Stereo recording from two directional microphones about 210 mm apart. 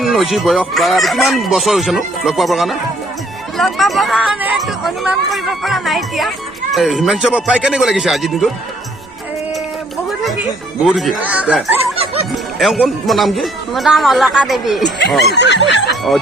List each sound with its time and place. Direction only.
0.0 s speech: centre (ahead or behind)
10.8 s speech: centre (ahead or behind)